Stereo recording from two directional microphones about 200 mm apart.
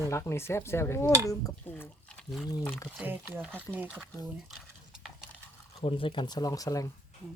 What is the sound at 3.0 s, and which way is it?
Speech, 10° right (ahead or behind).